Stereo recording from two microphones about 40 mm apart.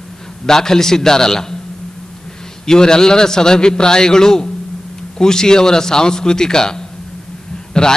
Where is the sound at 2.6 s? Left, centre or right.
Centre.